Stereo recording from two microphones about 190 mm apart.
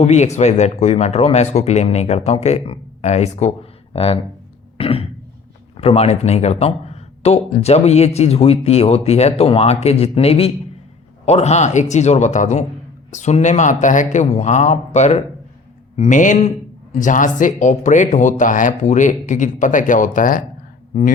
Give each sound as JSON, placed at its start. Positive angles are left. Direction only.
{"t": 0.0, "sound": "speech", "side_deg": 35}